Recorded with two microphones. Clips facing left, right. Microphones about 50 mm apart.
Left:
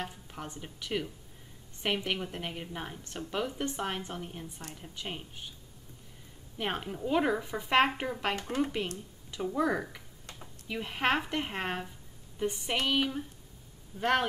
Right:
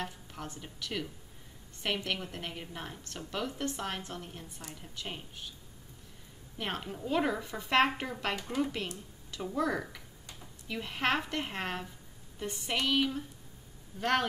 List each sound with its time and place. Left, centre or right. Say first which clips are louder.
0.0 s a woman's voice: even; centre
6.6 s a woman's voice: left 3 dB; centre